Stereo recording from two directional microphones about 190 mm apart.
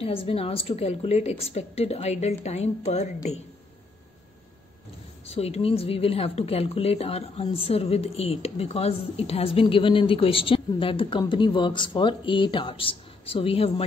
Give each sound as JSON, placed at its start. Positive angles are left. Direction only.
{"t": 0.0, "sound": "a woman's voice", "side_deg": 30}
{"t": 5.2, "sound": "speech", "side_deg": 30}